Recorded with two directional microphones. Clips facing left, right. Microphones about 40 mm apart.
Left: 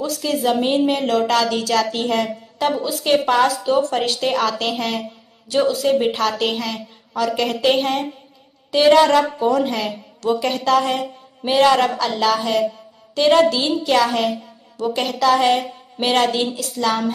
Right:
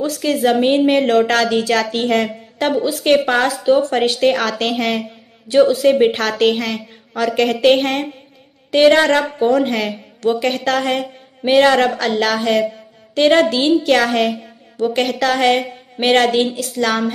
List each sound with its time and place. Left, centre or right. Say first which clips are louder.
0.3 s a woman's voice: right 4 dB; right
6.1 s a woman's voice: right 4 dB; right